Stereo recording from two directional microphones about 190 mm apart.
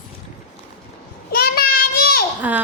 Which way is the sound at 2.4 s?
10° right (ahead or behind).